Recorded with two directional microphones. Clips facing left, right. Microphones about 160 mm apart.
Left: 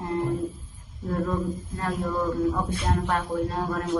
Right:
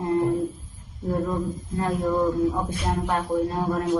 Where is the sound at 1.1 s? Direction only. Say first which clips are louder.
Right 1 dB; 20° right (ahead or behind).